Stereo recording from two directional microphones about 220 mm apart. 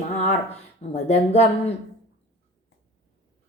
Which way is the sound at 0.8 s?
30° left (ahead or behind).